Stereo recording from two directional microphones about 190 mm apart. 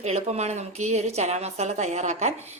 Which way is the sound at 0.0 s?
35° right (ahead or behind).